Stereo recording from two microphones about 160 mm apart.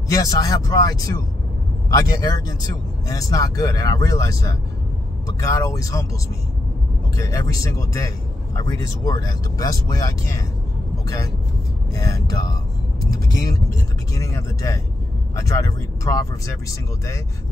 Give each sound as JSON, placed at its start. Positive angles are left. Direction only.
{"t": 0.1, "sound": "speech", "side_deg": 20}
{"t": 7.2, "sound": "speech", "side_deg": 20}
{"t": 11.9, "sound": "speech", "side_deg": 20}